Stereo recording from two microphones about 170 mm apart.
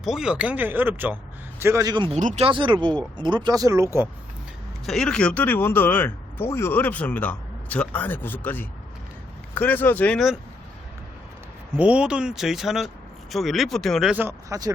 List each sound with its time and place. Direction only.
0.0 s speech: 5° right (ahead or behind); by 2.1 s 25° right (ahead or behind)
2.1 s speech: 45° right (ahead or behind)
2.5 s speech: 30° right (ahead or behind)
4.9 s speech: 5° left (ahead or behind)
11.8 s speech: 5° right (ahead or behind)